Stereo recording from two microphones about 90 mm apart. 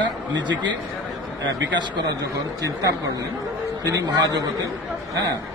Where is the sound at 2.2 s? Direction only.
40° right (ahead or behind).